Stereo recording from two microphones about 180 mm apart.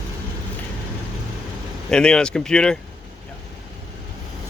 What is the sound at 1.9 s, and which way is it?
Speech, 5° left (ahead or behind).